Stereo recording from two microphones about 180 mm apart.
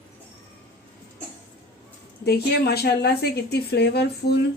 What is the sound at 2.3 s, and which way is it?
A woman's voice, 60° left (ahead or behind).